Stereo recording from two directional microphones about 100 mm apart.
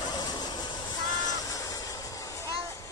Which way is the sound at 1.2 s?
35° left (ahead or behind).